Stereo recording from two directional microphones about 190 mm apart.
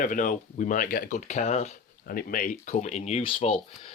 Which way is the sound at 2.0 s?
50° left (ahead or behind).